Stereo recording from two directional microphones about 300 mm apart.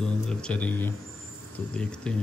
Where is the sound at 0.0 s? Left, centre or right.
Centre.